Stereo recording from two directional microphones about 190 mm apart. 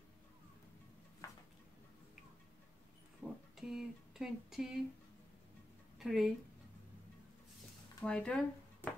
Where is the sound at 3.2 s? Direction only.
10° right (ahead or behind).